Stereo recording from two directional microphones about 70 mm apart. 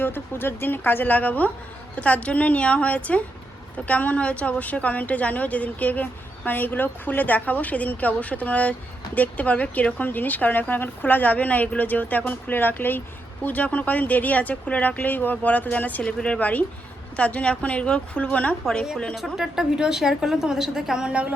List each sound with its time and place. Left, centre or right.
0.0 s a woman's voice: left; by 18.9 s centre
19.1 s a woman's voice: centre